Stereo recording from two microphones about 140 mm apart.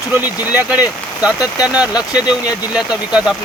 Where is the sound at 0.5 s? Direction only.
10° right (ahead or behind).